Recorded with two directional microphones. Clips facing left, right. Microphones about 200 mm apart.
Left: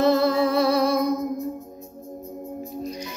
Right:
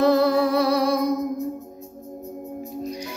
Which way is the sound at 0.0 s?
15° right (ahead or behind).